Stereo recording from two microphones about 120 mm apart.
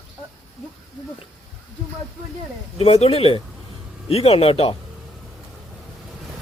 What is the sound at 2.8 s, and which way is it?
Speech, 55° left (ahead or behind).